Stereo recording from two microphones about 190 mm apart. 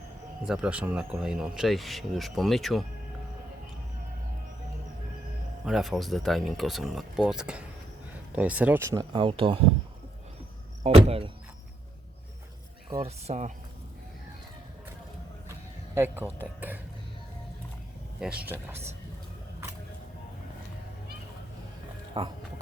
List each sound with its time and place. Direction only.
0.4 s speech: 5° right (ahead or behind)
5.6 s speech: centre (ahead or behind)
9.1 s speech: 25° right (ahead or behind)
10.8 s speech: 30° right (ahead or behind)
12.9 s speech: 30° right (ahead or behind)
16.0 s speech: 10° right (ahead or behind)
18.2 s speech: 5° right (ahead or behind)
22.2 s speech: 25° right (ahead or behind)